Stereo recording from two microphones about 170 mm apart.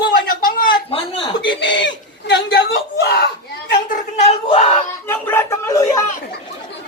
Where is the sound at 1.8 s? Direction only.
85° left.